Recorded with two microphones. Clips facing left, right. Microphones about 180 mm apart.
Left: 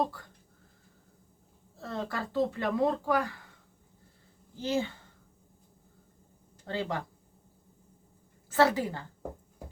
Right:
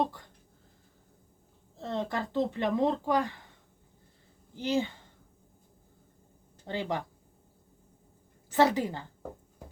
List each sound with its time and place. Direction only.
1.8 s speech: 20° right (ahead or behind)
4.5 s a woman's voice: 15° right (ahead or behind)
6.7 s a woman's voice: 15° right (ahead or behind)
8.4 s a woman's voice: 20° right (ahead or behind)